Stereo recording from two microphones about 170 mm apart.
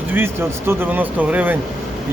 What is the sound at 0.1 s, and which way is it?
A man's voice, 15° right (ahead or behind).